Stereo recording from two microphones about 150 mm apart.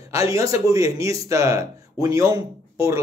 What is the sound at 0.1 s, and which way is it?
Speech, 20° right (ahead or behind).